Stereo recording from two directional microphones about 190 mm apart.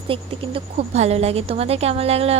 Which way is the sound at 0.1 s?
30° right (ahead or behind).